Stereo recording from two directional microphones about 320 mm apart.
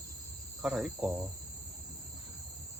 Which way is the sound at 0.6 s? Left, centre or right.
Centre.